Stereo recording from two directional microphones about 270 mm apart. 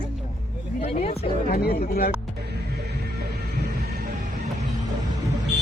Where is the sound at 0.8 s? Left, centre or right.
Left.